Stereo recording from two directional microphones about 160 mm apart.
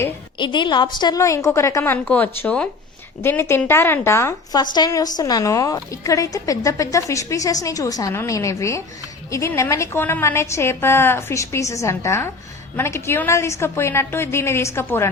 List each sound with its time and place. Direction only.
0.3 s a woman's voice: 30° left (ahead or behind)